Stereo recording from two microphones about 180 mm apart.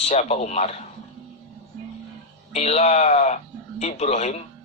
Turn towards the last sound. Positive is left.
turn(degrees=40)  # may be behind; listen again after turning